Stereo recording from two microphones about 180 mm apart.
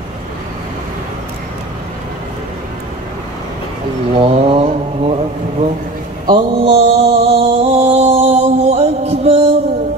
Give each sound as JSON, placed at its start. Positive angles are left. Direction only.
{"t": 4.2, "sound": "vehicle", "side_deg": -30}
{"t": 6.2, "sound": "mantra", "side_deg": -30}